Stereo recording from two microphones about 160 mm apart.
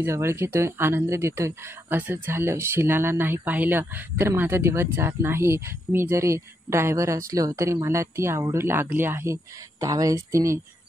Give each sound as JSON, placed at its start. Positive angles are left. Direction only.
{"t": 0.0, "sound": "speech", "side_deg": -15}